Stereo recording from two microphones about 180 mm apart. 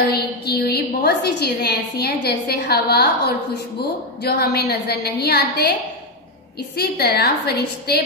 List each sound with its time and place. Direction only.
0.1 s a woman's voice: 60° left (ahead or behind)
6.8 s a woman's voice: 65° left (ahead or behind)